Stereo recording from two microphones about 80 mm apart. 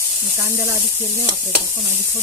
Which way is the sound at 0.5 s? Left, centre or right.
Right.